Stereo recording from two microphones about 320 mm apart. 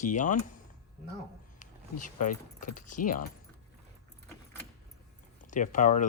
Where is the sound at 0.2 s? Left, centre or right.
Left.